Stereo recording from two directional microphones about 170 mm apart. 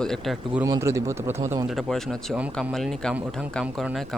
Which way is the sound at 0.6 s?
20° right (ahead or behind).